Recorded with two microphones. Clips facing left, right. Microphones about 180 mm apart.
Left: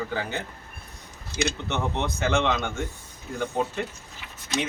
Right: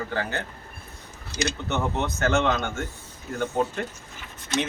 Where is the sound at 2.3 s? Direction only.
Centre (ahead or behind).